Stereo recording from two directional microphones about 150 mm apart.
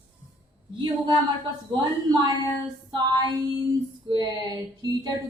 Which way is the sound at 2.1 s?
30° right (ahead or behind).